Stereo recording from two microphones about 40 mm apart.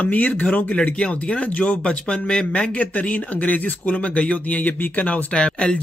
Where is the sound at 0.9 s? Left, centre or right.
Left.